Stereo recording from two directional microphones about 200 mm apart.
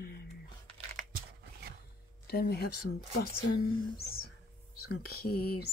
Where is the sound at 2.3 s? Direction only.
50° left (ahead or behind).